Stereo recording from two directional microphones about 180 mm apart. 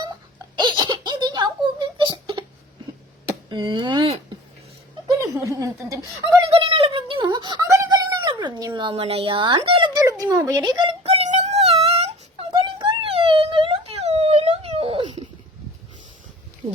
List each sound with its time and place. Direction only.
0.5 s giggle: 25° right (ahead or behind)
3.2 s speech: 25° right (ahead or behind)
5.3 s a woman's voice: 15° right (ahead or behind)
6.5 s a sound: 30° right (ahead or behind)
10.0 s a sound: 15° right (ahead or behind); by 11.8 s 35° right (ahead or behind)
11.9 s whimper: 30° right (ahead or behind)